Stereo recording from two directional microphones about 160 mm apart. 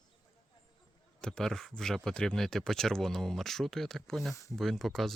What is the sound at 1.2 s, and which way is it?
Speech, 5° left (ahead or behind).